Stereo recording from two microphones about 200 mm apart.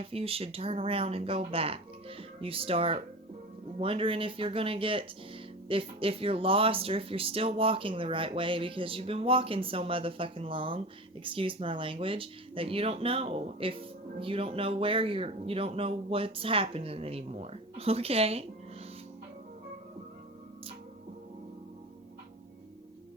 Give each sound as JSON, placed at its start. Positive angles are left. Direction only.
{"t": 0.0, "sound": "speech", "side_deg": -30}